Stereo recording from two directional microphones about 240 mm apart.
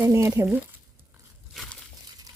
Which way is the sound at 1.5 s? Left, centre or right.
Centre.